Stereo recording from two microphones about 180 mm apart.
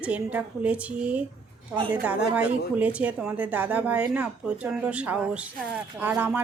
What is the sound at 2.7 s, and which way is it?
A woman's voice, 10° right (ahead or behind).